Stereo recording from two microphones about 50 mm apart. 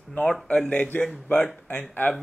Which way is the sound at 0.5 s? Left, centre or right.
Left.